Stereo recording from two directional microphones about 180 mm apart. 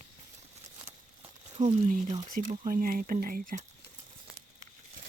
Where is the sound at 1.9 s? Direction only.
45° right (ahead or behind).